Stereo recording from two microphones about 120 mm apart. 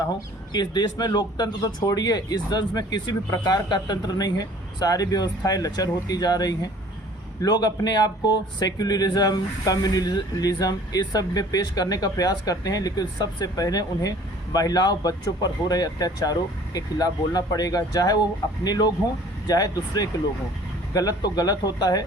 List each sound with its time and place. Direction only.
0.5 s speech: 35° left (ahead or behind)